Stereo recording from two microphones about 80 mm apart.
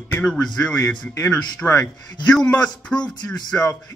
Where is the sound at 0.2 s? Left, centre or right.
Centre.